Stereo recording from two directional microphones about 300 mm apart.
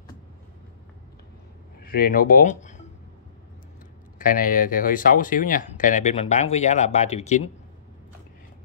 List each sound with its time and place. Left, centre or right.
1.8 s speech: left
4.2 s speech: left